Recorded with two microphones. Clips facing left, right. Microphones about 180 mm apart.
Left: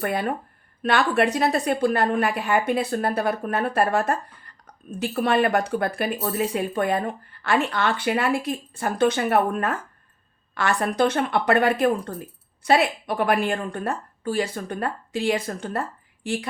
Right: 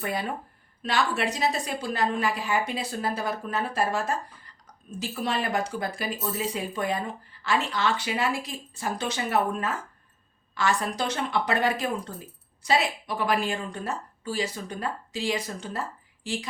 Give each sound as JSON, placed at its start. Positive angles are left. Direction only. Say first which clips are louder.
{"t": 0.0, "sound": "speech", "louder": "left 5 dB", "side_deg": 55}